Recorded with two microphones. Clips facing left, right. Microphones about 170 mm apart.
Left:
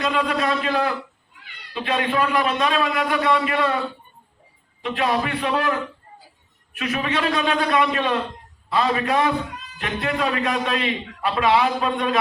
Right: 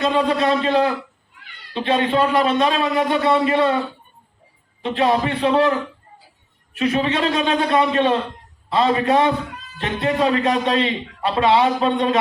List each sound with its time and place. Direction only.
0.0 s a man's voice: 30° right (ahead or behind)
4.8 s a man's voice: 30° right (ahead or behind)
6.7 s a man's voice: 30° right (ahead or behind)